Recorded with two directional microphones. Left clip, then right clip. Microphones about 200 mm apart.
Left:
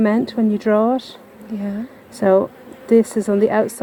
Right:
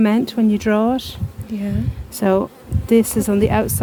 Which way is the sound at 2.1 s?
55° right (ahead or behind).